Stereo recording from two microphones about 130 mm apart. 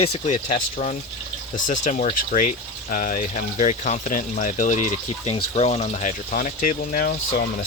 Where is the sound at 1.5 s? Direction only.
80° left.